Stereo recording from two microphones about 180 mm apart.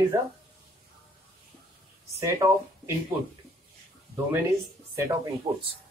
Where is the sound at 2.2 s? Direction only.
20° right (ahead or behind).